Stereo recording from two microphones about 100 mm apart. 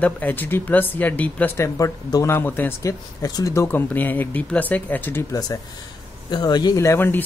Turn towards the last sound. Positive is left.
turn(degrees=25)  # may be behind; listen again after turning